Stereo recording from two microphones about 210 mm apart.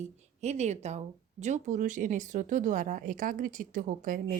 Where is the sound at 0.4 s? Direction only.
30° right (ahead or behind).